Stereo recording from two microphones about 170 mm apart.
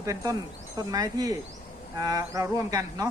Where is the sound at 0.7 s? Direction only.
20° right (ahead or behind).